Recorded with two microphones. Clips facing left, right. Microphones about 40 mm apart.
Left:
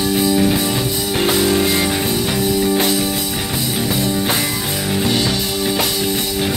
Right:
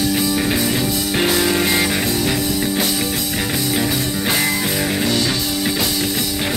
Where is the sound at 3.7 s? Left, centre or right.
Centre.